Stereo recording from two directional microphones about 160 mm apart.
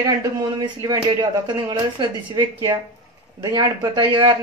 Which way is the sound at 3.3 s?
25° right (ahead or behind).